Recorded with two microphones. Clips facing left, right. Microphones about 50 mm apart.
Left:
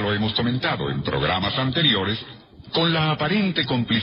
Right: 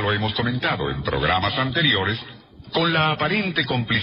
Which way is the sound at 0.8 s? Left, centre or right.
Centre.